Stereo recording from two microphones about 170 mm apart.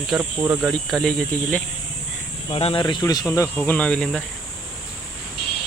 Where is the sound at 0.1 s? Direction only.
10° right (ahead or behind).